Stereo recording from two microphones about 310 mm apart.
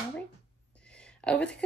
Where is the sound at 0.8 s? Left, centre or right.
Centre.